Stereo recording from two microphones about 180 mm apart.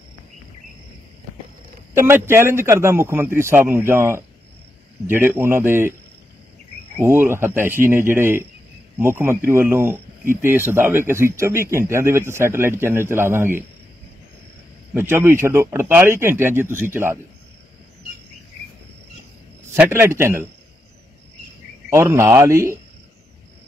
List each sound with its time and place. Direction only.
2.0 s a man's voice: 10° right (ahead or behind)
7.0 s a man's voice: 15° right (ahead or behind)
15.0 s a man's voice: 15° right (ahead or behind)
19.7 s a man's voice: 15° right (ahead or behind)
21.9 s a man's voice: 15° right (ahead or behind)